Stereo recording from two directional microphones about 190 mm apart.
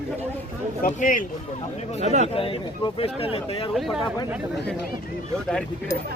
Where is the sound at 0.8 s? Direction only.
45° left (ahead or behind).